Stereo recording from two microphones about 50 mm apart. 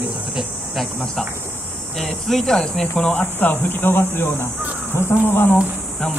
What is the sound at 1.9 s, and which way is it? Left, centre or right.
Speech, centre.